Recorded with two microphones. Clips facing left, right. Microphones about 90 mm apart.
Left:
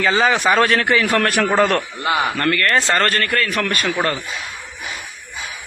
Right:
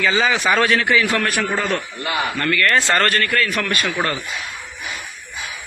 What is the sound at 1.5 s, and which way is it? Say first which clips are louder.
Speech: left 6 dB; 70° left (ahead or behind).